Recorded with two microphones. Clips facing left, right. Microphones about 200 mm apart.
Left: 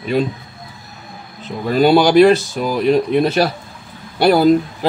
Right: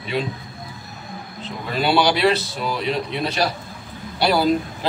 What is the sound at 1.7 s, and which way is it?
A man's voice, 45° left (ahead or behind).